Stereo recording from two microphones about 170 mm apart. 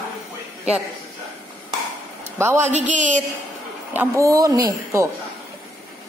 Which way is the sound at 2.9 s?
45° right (ahead or behind).